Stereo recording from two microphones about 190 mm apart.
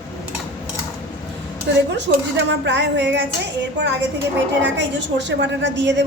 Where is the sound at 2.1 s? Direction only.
55° right (ahead or behind).